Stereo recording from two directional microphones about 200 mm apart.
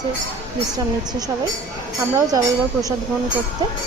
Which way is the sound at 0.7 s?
20° right (ahead or behind).